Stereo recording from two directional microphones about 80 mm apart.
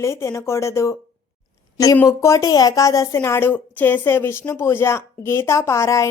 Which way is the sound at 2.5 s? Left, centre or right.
Left.